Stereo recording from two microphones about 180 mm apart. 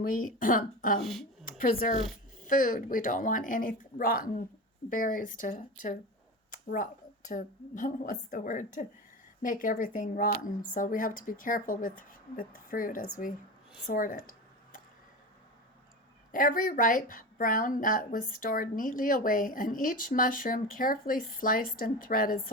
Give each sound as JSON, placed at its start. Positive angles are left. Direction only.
{"t": 0.0, "sound": "a woman's voice", "side_deg": 50}
{"t": 0.9, "sound": "speech", "side_deg": 0}
{"t": 1.5, "sound": "a woman's voice", "side_deg": 50}
{"t": 6.5, "sound": "a sound", "side_deg": 50}
{"t": 7.3, "sound": "a woman's voice", "side_deg": 45}
{"t": 13.8, "sound": "a sound", "side_deg": 50}
{"t": 16.3, "sound": "a woman's voice", "side_deg": 50}